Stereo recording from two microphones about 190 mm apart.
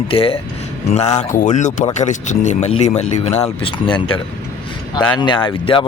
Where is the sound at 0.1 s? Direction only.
30° left (ahead or behind).